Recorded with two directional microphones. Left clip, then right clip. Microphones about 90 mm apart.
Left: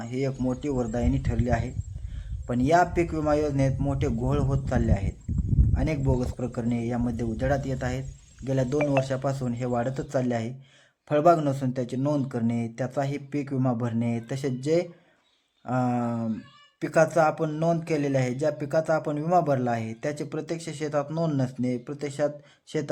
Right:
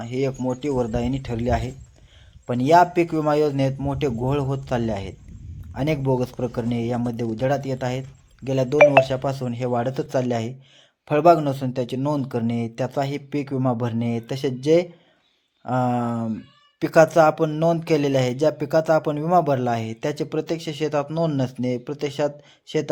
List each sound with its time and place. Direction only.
0.0 s speech: 20° right (ahead or behind)
0.3 s speech: 5° right (ahead or behind)